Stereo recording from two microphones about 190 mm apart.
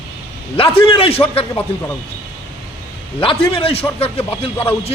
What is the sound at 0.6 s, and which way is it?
A man's voice, 30° left (ahead or behind).